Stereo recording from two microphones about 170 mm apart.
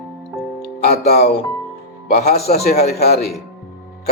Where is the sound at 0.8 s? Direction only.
65° left (ahead or behind).